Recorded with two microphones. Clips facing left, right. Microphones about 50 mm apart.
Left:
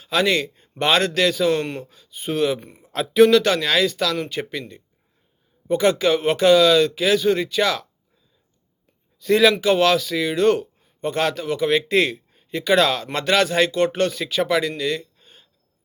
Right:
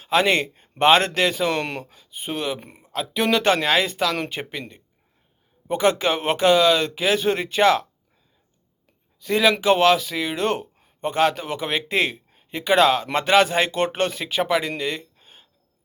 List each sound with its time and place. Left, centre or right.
0.0 s speech: right
1.6 s speech: right
1.9 s speech: centre
2.6 s a man's voice: right
2.9 s speech: centre
3.2 s speech: right
5.6 s speech: right
9.2 s speech: centre
9.5 s speech: right
14.8 s a sound: right